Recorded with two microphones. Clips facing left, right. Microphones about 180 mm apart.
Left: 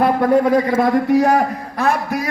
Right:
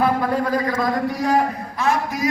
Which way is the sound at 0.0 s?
65° left (ahead or behind).